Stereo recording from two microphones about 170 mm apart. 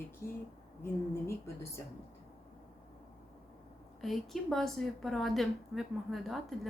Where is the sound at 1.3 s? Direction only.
15° left (ahead or behind).